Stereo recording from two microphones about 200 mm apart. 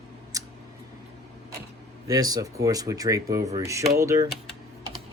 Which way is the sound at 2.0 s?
20° right (ahead or behind).